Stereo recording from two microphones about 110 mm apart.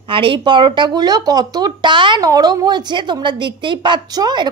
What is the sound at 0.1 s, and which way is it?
A woman's voice, 50° right (ahead or behind).